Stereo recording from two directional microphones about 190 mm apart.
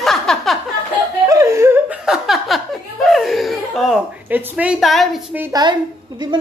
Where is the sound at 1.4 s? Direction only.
15° right (ahead or behind).